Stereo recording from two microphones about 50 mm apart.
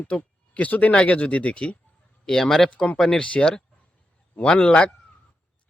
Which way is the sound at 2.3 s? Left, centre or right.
Centre.